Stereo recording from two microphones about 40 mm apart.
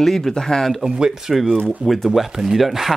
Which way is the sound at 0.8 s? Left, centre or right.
Centre.